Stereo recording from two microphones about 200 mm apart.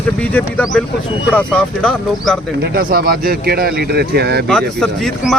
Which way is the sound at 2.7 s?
50° right (ahead or behind).